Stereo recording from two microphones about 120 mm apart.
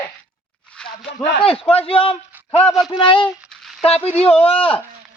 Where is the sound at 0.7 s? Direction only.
5° left (ahead or behind).